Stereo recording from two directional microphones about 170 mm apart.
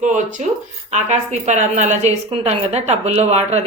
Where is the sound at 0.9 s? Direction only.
40° right (ahead or behind).